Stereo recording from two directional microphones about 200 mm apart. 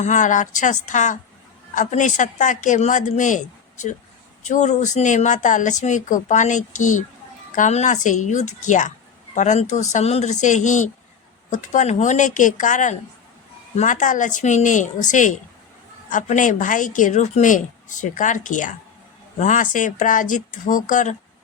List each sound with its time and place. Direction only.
0.0 s a woman's voice: 40° left (ahead or behind)